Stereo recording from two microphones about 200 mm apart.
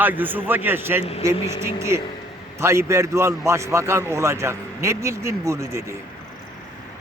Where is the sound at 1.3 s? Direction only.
30° left (ahead or behind).